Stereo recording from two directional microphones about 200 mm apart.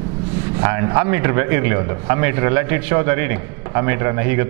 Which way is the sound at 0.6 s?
15° right (ahead or behind).